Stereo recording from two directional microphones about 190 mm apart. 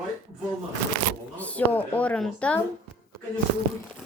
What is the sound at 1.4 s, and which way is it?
Speech, 10° left (ahead or behind).